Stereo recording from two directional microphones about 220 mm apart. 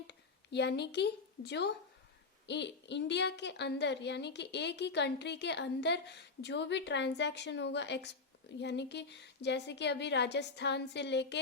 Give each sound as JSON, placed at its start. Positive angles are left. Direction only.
{"t": 0.1, "sound": "a woman's voice", "side_deg": 50}